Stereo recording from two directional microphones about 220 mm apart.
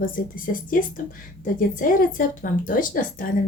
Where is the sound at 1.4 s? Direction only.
40° left (ahead or behind).